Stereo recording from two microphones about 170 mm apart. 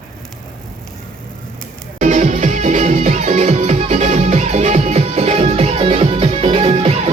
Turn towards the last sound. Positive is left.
turn(degrees=-40)  # may be behind; listen again after turning